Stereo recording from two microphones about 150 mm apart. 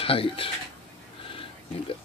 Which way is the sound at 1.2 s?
35° left (ahead or behind).